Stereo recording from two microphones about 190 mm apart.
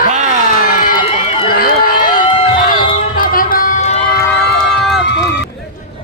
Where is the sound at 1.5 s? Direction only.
50° left (ahead or behind).